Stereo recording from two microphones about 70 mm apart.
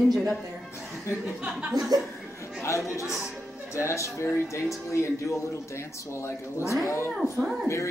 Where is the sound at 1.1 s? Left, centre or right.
Centre.